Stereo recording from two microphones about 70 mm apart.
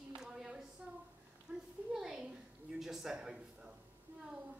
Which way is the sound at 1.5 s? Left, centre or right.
Centre.